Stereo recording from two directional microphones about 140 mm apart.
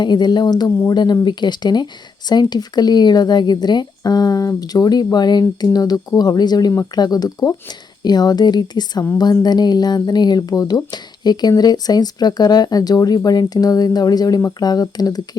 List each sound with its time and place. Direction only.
0.0 s speech: 30° left (ahead or behind)